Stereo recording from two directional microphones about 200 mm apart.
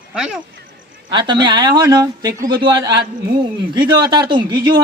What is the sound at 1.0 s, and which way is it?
Speech, 25° right (ahead or behind).